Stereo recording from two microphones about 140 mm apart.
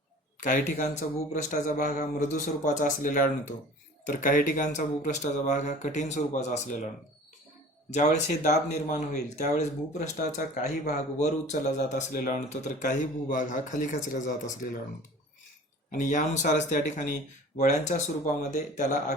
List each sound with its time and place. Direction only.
0.3 s speech: 60° left (ahead or behind)
15.9 s speech: 65° left (ahead or behind)